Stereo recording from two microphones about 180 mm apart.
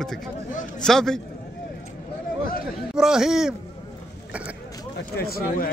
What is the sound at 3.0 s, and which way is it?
Speech, centre (ahead or behind).